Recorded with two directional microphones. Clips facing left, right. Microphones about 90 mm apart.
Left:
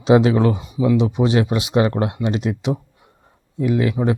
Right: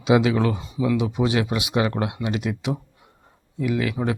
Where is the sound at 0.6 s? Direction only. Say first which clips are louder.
Left 5 dB; 15° left (ahead or behind).